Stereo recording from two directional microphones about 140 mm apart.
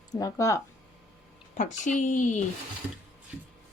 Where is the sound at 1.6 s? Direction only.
60° left (ahead or behind).